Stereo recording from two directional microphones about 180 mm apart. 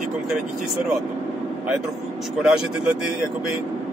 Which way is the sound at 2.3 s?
5° right (ahead or behind).